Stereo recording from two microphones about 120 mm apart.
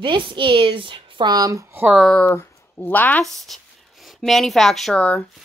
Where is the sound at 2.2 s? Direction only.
15° left (ahead or behind).